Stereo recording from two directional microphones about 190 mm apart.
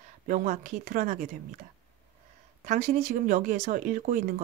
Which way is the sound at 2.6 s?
40° right (ahead or behind).